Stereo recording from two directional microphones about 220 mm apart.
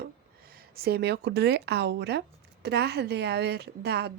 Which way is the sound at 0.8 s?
45° right (ahead or behind).